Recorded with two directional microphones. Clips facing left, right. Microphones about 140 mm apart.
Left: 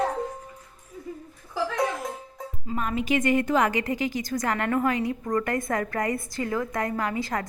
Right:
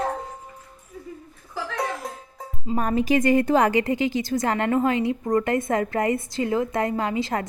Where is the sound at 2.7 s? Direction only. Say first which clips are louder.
Right 5 dB; 35° right (ahead or behind).